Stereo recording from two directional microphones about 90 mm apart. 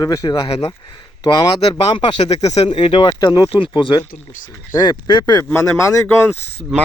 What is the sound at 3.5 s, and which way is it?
Speech, 70° left (ahead or behind).